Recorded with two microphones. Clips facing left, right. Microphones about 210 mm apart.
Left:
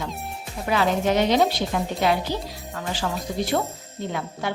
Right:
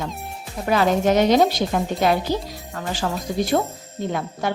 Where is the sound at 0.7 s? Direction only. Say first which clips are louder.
Right 3 dB; 45° right (ahead or behind).